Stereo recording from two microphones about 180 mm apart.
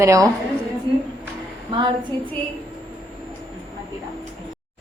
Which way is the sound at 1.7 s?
30° right (ahead or behind).